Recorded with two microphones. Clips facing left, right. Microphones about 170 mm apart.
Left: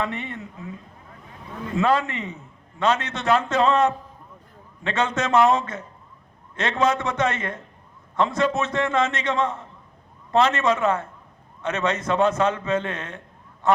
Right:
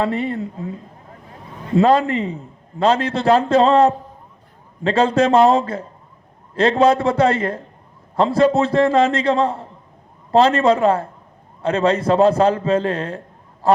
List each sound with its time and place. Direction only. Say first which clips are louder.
0.0 s a man's voice: right 8 dB; 35° right (ahead or behind)